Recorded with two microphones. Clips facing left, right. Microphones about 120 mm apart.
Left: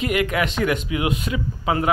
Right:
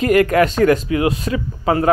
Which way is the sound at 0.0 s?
45° right (ahead or behind).